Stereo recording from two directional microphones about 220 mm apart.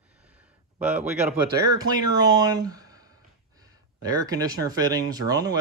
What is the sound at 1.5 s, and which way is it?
Speech, 15° right (ahead or behind).